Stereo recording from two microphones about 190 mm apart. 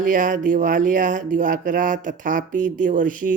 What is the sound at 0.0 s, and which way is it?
Speech, 45° right (ahead or behind).